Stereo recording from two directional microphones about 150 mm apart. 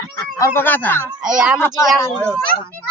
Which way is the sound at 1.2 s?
5° right (ahead or behind).